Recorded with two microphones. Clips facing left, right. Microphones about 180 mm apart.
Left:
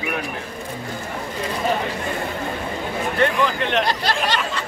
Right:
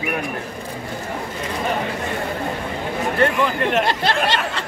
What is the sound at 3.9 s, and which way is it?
Speech, 25° right (ahead or behind).